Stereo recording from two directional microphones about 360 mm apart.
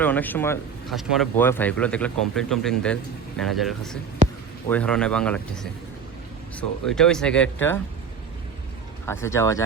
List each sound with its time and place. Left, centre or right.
0.0 s speech: centre
4.2 s basketball bounce: right
4.7 s speech: centre
6.6 s speech: centre
9.0 s speech: centre